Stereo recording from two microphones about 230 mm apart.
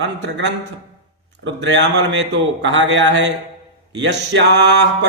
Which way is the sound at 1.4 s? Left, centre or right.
Right.